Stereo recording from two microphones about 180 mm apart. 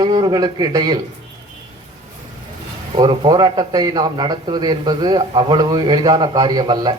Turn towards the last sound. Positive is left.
turn(degrees=-20)  # may be behind; listen again after turning